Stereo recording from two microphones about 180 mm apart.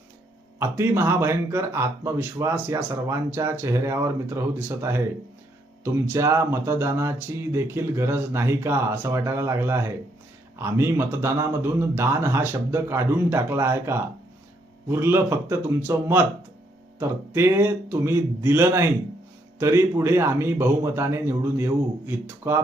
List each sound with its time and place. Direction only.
0.6 s speech: 15° right (ahead or behind)